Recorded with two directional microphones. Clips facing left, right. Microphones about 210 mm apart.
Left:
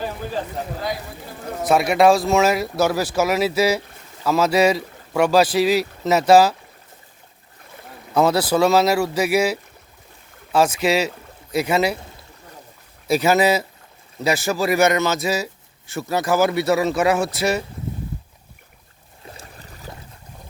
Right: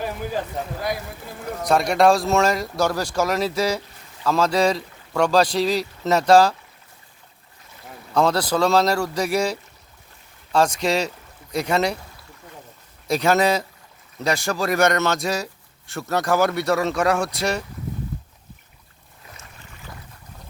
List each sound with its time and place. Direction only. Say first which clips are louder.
1.6 s speech: left 2 dB; 5° left (ahead or behind)
8.1 s speech: left 2 dB; 5° left (ahead or behind)
13.1 s speech: left 2 dB; 5° left (ahead or behind)
19.3 s boat: left 4 dB; 35° left (ahead or behind)